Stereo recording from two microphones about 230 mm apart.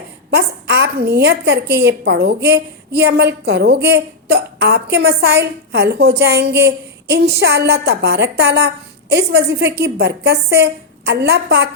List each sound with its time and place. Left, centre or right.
0.3 s a woman's voice: right